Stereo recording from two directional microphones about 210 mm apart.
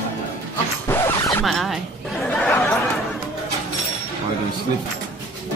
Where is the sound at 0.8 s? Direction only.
10° left (ahead or behind).